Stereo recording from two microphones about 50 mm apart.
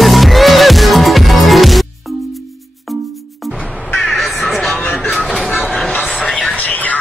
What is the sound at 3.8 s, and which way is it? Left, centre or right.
Crow, left.